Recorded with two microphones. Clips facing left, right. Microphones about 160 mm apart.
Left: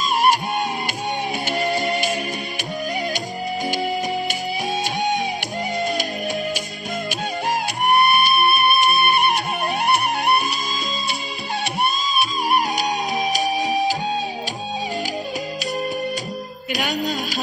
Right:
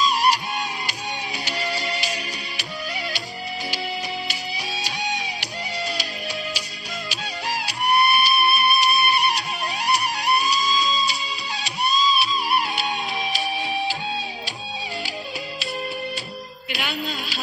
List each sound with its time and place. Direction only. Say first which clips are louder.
0.0 s music: left 2 dB; 50° left (ahead or behind)
4.8 s music: left 5 dB; 50° left (ahead or behind)
7.1 s music: left 6 dB; 50° left (ahead or behind)
16.7 s music: left 6 dB; 45° left (ahead or behind)